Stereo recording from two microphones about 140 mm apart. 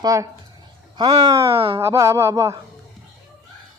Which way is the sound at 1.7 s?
20° right (ahead or behind).